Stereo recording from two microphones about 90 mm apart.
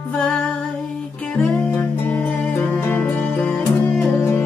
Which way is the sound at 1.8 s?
20° left (ahead or behind).